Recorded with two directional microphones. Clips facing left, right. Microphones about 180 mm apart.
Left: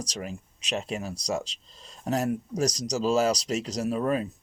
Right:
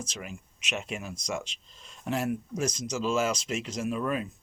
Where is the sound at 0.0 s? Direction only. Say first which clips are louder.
Left 4 dB; 35° left (ahead or behind).